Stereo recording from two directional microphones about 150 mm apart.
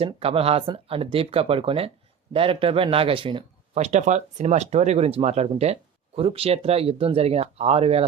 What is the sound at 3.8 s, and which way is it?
Speech, 50° right (ahead or behind).